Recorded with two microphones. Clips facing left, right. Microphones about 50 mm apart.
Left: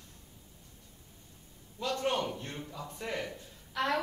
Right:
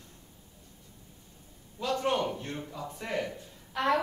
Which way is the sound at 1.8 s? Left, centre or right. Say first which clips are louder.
Right 3 dB; centre.